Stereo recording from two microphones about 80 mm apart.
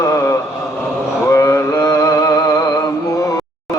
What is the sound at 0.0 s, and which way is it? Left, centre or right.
Mantra, left.